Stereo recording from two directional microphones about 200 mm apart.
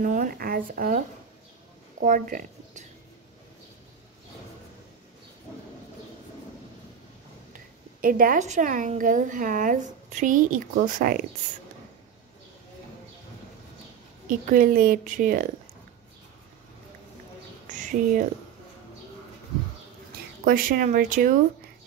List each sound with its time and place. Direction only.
0.0 s a woman's voice: 40° right (ahead or behind)
7.5 s a woman's voice: 45° right (ahead or behind)
14.5 s speech: 45° right (ahead or behind)
17.6 s a sound: 40° right (ahead or behind)
20.4 s speech: 45° right (ahead or behind)